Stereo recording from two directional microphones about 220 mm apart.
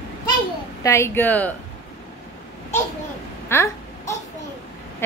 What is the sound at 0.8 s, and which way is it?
Speech, 10° left (ahead or behind).